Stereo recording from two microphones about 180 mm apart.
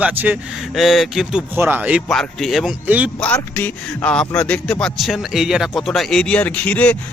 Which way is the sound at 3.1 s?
10° left (ahead or behind).